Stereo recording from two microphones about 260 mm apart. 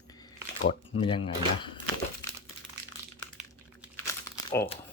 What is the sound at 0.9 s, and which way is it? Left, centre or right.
Speech, centre.